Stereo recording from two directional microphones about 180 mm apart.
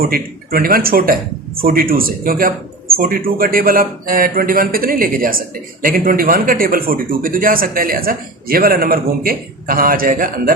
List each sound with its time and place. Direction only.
0.0 s speech: 55° right (ahead or behind)